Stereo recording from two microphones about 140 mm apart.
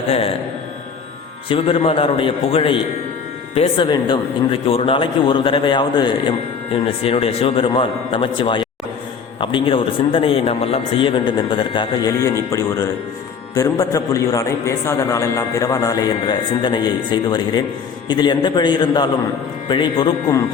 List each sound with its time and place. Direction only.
1.5 s speech: 40° left (ahead or behind)
12.2 s a man's voice: 20° left (ahead or behind)